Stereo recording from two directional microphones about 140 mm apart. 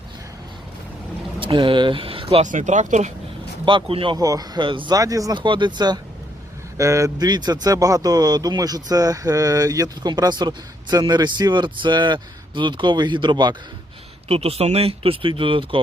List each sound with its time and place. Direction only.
1.4 s speech: 35° right (ahead or behind)
2.4 s speech: 65° right (ahead or behind)
3.7 s speech: 40° right (ahead or behind)
4.2 s speech: 25° right (ahead or behind)
4.9 s speech: 25° right (ahead or behind)
14.3 s speech: 45° right (ahead or behind)